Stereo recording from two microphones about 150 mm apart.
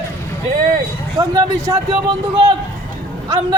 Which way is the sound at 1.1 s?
25° right (ahead or behind).